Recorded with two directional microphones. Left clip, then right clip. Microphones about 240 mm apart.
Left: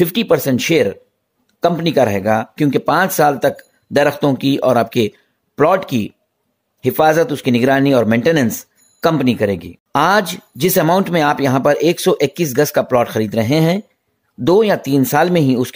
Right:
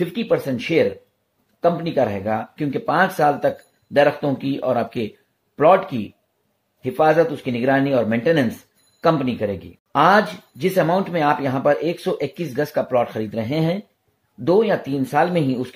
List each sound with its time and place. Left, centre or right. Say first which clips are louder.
0.0 s speech: left 6 dB; left